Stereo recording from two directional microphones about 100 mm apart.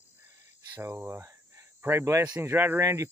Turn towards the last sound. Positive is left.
turn(degrees=-25)  # may be behind; listen again after turning